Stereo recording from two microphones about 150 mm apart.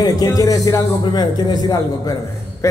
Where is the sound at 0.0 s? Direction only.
25° left (ahead or behind).